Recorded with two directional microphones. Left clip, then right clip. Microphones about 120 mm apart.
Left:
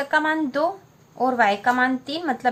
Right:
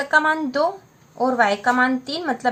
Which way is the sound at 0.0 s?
25° right (ahead or behind).